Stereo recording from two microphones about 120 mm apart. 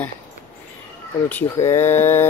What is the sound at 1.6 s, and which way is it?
Speech, 20° left (ahead or behind).